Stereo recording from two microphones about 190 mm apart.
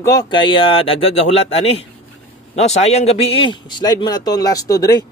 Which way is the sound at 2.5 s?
35° left (ahead or behind).